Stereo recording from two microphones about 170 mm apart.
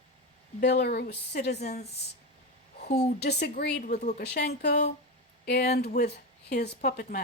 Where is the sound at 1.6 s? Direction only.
40° left (ahead or behind).